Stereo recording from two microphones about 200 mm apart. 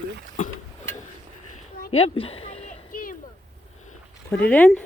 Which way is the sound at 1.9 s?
30° left (ahead or behind).